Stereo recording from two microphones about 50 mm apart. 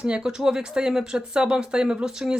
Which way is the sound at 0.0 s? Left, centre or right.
Centre.